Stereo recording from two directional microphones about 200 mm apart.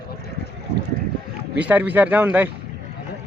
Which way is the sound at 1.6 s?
10° right (ahead or behind).